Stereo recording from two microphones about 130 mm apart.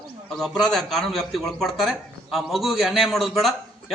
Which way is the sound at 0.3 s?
Centre (ahead or behind).